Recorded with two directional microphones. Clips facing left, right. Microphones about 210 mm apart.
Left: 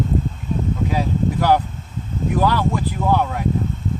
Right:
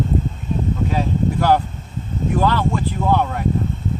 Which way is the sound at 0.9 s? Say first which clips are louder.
Even; 10° left (ahead or behind).